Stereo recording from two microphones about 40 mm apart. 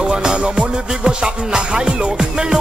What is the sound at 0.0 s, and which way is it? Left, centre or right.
Music, centre.